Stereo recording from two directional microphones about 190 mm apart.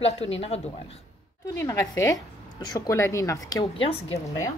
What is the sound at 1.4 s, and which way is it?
A woman's voice, 15° left (ahead or behind).